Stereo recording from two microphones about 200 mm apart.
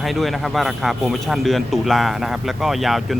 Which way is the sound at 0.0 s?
Centre (ahead or behind).